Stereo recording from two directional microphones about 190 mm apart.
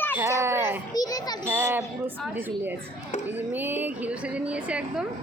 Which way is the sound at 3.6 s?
10° right (ahead or behind).